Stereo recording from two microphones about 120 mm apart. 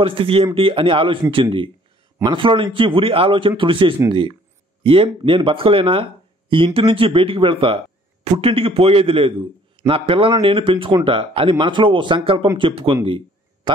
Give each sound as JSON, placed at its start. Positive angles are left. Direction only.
{"t": 0.0, "sound": "speech", "side_deg": -45}